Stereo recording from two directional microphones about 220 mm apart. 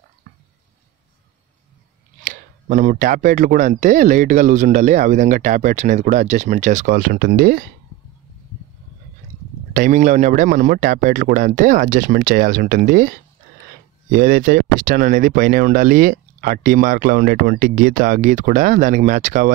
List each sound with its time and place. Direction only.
0.3 s a sound: 40° right (ahead or behind)
2.3 s speech: 35° right (ahead or behind)
9.8 s speech: 35° right (ahead or behind)
14.1 s speech: 40° right (ahead or behind)